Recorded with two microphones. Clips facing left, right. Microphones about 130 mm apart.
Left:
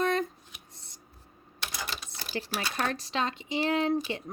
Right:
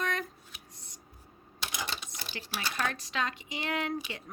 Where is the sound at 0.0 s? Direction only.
30° left (ahead or behind).